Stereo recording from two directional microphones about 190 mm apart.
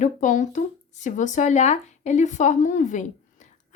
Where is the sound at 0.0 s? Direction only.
40° left (ahead or behind).